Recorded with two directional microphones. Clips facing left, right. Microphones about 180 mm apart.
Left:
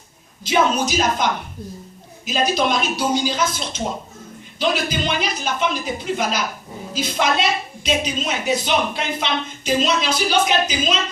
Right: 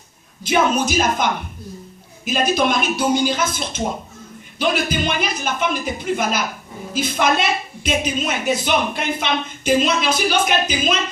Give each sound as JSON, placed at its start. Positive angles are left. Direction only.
{"t": 0.9, "sound": "speech", "side_deg": -50}